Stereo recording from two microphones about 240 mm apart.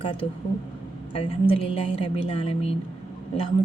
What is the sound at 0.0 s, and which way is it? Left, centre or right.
A woman's voice, left.